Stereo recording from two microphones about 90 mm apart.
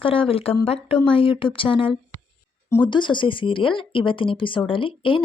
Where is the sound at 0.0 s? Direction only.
85° left.